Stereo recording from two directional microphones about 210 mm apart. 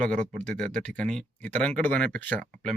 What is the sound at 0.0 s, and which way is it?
Speech, 5° left (ahead or behind).